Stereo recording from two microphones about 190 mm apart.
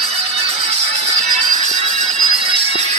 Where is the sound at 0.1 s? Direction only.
30° right (ahead or behind).